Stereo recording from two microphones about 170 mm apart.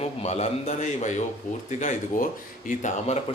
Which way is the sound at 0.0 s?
40° left (ahead or behind).